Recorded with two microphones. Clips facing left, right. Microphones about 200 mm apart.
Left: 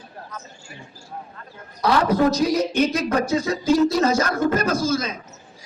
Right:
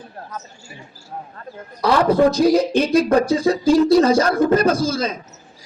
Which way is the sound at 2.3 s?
30° right (ahead or behind).